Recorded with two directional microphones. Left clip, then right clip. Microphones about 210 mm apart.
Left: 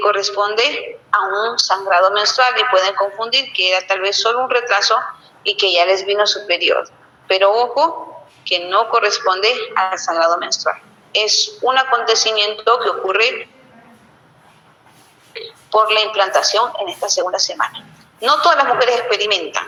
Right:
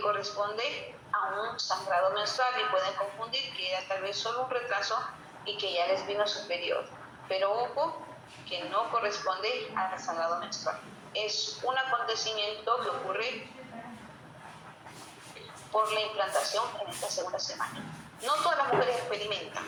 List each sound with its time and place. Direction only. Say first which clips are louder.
0.0 s a woman's voice: left 15 dB; 50° left (ahead or behind)
15.7 s a woman's voice: left 15 dB; 50° left (ahead or behind)